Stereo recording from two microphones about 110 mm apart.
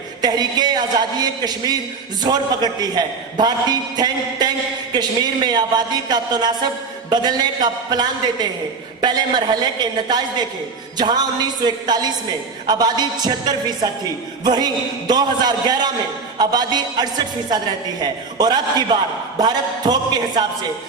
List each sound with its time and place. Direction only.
0.2 s a man's voice: 40° right (ahead or behind)
10.9 s a man's voice: 40° right (ahead or behind)